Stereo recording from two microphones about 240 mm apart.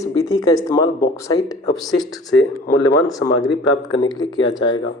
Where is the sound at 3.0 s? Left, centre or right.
Centre.